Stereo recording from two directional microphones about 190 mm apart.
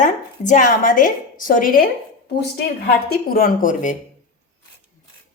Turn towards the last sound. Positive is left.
turn(degrees=40)  # may be behind; listen again after turning